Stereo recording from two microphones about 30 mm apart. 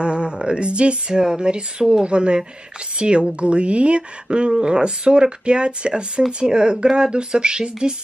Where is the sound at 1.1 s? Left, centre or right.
Right.